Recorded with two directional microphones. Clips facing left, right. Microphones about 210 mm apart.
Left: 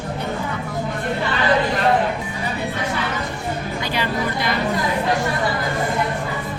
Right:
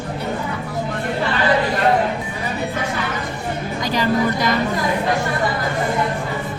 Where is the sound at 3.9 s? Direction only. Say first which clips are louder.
Right 6 dB; 40° right (ahead or behind).